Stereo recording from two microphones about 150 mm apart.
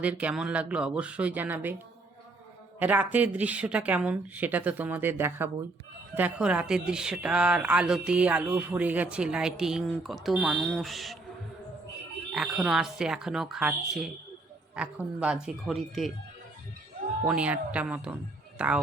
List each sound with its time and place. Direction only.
0.0 s speech: 10° right (ahead or behind)
2.7 s speech: 10° right (ahead or behind)
12.3 s speech: centre (ahead or behind)
17.2 s speech: 10° right (ahead or behind)